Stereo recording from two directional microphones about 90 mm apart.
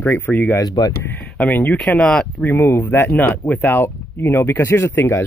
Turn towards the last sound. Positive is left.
turn(degrees=30)  # may be behind; listen again after turning